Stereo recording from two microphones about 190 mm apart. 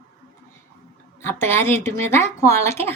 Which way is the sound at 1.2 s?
10° left (ahead or behind).